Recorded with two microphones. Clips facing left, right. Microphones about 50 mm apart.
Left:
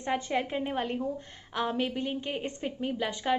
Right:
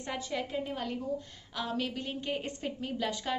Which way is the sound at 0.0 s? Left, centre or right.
Left.